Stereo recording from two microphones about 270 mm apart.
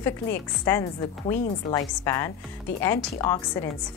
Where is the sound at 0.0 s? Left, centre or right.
Centre.